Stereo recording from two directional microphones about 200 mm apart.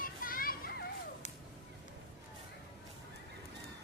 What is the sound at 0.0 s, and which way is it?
Children playing, 45° left (ahead or behind).